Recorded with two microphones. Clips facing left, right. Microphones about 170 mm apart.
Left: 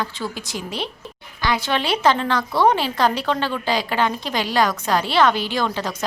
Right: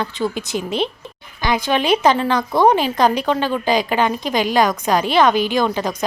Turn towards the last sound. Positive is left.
turn(degrees=-15)  # may be behind; listen again after turning